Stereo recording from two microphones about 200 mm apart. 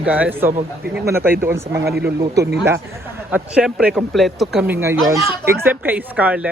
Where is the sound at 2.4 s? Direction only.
55° right (ahead or behind).